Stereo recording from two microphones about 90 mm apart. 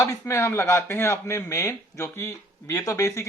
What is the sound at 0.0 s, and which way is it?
A man's voice, 35° left (ahead or behind).